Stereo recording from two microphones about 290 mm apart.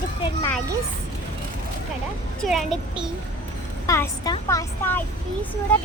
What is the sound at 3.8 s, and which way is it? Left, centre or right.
Speech, centre.